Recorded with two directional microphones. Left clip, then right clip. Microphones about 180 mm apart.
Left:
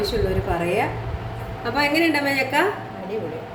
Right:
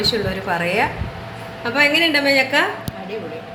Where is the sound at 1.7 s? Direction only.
20° right (ahead or behind).